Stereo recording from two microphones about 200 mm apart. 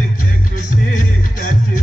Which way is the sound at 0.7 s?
40° left (ahead or behind).